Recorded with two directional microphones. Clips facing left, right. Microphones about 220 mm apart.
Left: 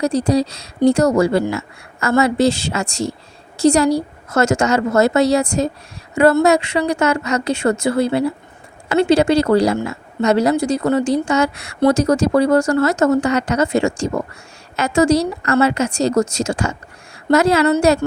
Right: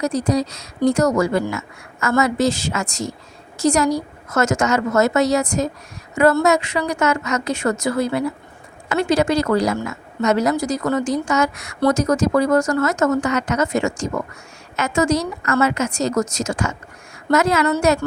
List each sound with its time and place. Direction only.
0.0 s speech: 30° left (ahead or behind)